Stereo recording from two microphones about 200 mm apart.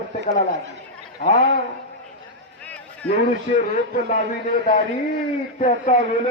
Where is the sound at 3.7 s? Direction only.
40° left (ahead or behind).